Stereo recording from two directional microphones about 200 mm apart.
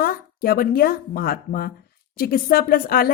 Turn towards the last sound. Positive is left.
turn(degrees=45)  # may be behind; listen again after turning